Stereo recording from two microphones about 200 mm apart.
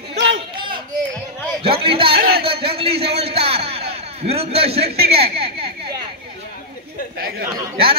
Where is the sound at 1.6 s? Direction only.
25° right (ahead or behind).